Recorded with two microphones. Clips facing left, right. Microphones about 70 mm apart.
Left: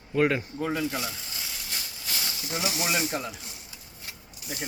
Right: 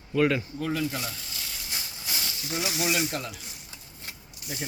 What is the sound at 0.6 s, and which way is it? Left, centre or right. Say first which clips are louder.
Speech: left 1 dB; centre.